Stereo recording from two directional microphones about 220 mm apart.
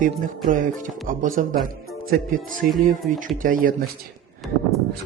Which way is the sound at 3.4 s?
40° right (ahead or behind).